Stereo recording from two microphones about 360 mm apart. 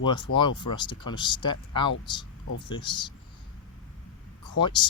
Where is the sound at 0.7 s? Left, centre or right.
Centre.